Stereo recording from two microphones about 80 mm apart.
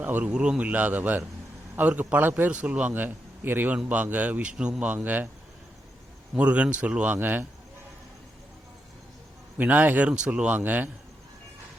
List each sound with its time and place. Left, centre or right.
0.0 s a man's voice: right
6.3 s speech: centre
9.6 s a man's voice: right